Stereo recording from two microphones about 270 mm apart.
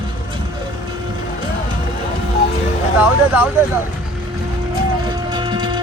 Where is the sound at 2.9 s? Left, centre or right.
Centre.